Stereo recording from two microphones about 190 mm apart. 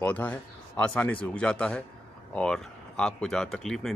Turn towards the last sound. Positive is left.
turn(degrees=5)  # may be behind; listen again after turning